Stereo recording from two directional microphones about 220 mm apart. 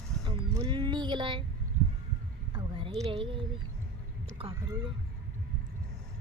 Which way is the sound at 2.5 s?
25° right (ahead or behind).